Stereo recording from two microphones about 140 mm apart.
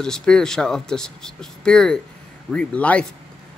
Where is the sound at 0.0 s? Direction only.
5° left (ahead or behind).